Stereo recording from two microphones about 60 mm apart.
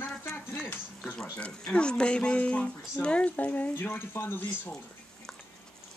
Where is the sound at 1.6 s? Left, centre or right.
Centre.